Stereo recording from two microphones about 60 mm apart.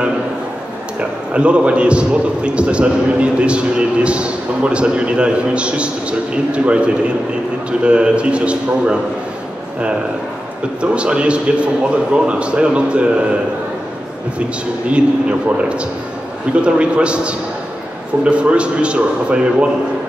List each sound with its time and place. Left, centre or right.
1.3 s a man's voice: centre
10.8 s a man's voice: centre
14.9 s a man's voice: centre